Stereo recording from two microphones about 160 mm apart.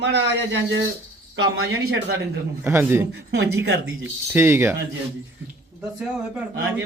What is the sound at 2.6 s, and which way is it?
Speech, 15° right (ahead or behind).